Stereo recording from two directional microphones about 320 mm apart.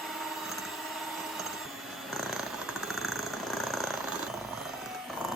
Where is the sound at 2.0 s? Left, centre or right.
Centre.